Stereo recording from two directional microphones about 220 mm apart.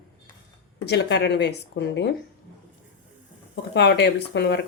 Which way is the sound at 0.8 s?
50° left (ahead or behind).